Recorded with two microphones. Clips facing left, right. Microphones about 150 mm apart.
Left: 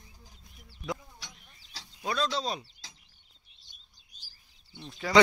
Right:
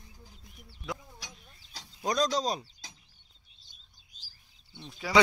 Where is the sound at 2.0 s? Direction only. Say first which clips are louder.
Right 3 dB; 40° right (ahead or behind).